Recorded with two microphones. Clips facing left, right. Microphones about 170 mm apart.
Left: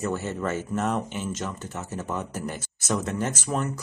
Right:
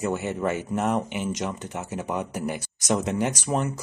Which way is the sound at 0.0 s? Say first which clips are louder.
Right 2 dB; 15° right (ahead or behind).